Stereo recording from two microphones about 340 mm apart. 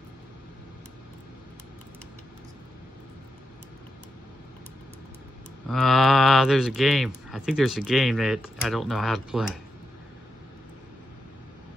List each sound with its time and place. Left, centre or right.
5.7 s speech: centre